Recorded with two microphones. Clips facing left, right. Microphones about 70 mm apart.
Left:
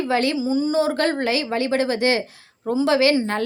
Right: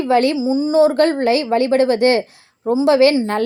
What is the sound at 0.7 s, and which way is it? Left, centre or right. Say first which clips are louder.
A woman's voice: right 7 dB; right.